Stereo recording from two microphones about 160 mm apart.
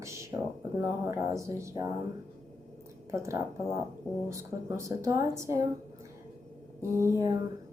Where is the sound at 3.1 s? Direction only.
20° right (ahead or behind).